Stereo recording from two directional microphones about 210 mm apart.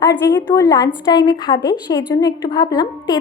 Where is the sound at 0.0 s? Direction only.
20° left (ahead or behind).